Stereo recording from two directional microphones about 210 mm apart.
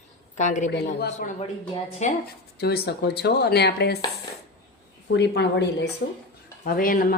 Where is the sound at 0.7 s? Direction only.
50° left (ahead or behind).